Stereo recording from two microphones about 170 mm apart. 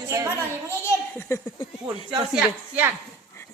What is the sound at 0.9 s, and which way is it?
Speech, 15° left (ahead or behind).